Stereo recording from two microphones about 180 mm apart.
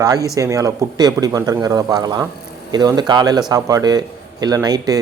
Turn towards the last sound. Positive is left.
turn(degrees=-20)  # may be behind; listen again after turning